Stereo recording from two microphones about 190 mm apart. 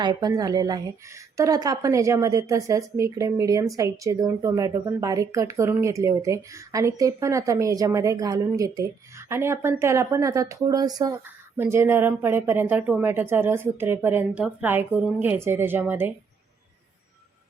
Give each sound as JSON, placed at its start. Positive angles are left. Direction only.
{"t": 0.0, "sound": "a woman's voice", "side_deg": -20}